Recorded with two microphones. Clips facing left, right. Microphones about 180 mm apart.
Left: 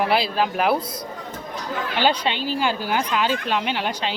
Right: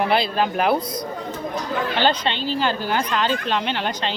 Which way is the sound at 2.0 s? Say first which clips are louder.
Left 1 dB; 10° left (ahead or behind).